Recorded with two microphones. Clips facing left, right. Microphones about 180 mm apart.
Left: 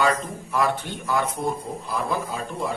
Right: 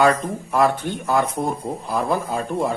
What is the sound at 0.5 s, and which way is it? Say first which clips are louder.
Speech: right 5 dB; 50° right (ahead or behind).